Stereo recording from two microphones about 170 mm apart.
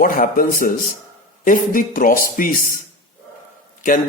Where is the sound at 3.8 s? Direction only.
50° left (ahead or behind).